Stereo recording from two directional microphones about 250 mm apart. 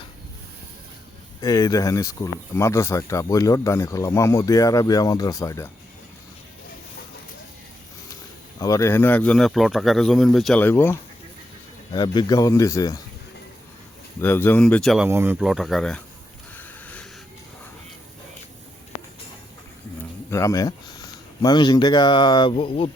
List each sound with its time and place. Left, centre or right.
1.4 s speech: centre
8.5 s speech: centre
11.9 s speech: centre
14.2 s speech: centre
16.6 s a sound: centre
20.3 s speech: centre